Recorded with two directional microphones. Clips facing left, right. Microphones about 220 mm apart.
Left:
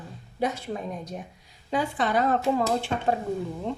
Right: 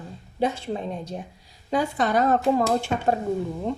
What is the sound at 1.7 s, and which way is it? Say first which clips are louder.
Speech: right 3 dB; 45° right (ahead or behind).